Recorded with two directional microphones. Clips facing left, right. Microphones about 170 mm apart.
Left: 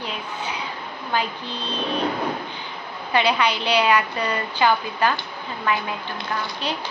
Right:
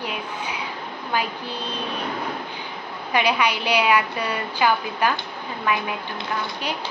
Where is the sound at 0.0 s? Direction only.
10° right (ahead or behind).